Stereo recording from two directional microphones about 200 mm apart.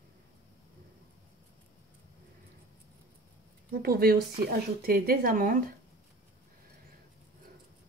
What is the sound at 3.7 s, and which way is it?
Speech, 50° right (ahead or behind).